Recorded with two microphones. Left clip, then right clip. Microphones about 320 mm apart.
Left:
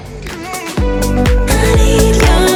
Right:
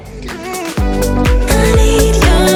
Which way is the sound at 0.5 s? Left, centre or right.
Centre.